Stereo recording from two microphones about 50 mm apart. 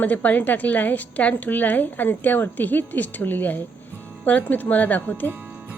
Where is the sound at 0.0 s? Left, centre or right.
Left.